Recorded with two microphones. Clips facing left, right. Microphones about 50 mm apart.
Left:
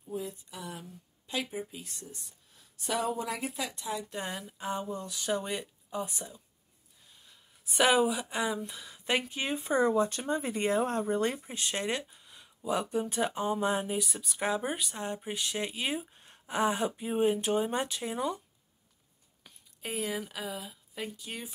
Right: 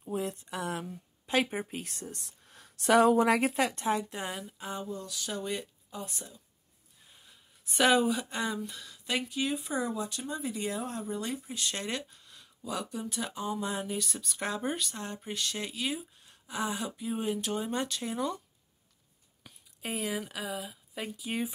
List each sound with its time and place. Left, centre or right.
0.0 s speech: right
4.1 s speech: centre
4.8 s speech: left
5.5 s speech: centre
7.6 s speech: centre
8.9 s a sound: left
9.3 s speech: left
13.9 s speech: centre
15.8 s speech: left; by 18.4 s centre
19.4 s speech: centre